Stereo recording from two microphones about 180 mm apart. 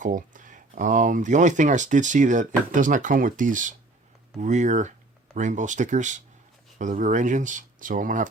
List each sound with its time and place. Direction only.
0.0 s speech: 45° right (ahead or behind)